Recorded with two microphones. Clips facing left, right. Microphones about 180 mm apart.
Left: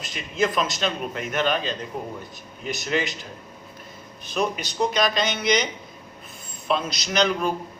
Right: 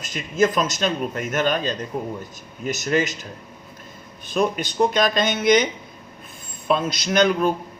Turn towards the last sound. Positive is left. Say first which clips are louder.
# right 4 dB
turn(degrees=-50)  # may be behind; listen again after turning